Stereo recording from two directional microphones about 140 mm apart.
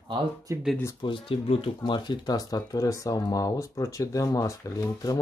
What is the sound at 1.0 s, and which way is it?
Speech, 40° left (ahead or behind).